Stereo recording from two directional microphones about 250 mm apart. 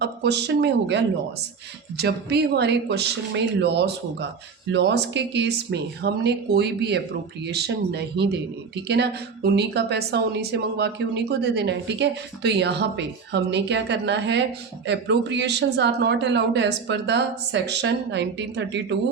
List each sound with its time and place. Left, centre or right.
0.0 s speech: right